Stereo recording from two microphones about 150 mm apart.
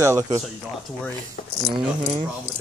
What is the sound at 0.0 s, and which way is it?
Speech, 20° right (ahead or behind).